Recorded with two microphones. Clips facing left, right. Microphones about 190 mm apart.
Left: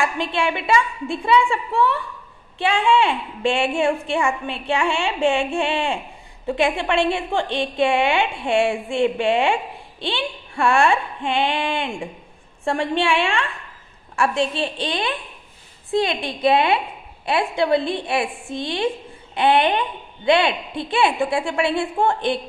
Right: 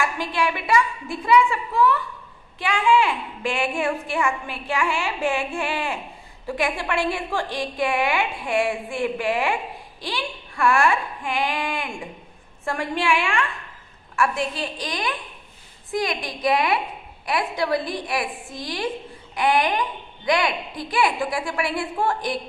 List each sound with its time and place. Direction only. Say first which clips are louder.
0.0 s a woman's voice: left 2 dB; 25° left (ahead or behind)